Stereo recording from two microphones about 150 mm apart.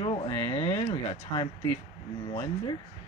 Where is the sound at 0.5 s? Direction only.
45° left (ahead or behind).